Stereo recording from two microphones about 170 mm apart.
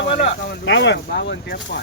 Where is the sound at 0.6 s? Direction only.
90° left.